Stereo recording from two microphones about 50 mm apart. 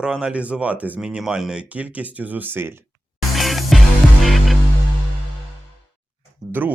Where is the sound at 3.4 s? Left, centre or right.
Centre.